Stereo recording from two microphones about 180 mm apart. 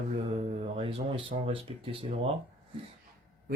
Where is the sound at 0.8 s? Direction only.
30° right (ahead or behind).